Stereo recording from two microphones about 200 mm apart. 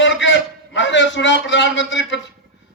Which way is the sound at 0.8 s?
65° left (ahead or behind).